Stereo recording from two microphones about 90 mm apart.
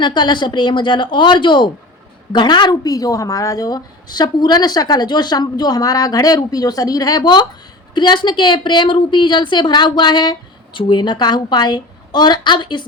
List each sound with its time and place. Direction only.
0.0 s a woman's voice: 55° left (ahead or behind)